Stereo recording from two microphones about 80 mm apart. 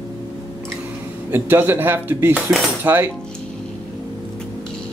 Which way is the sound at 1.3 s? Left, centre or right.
Right.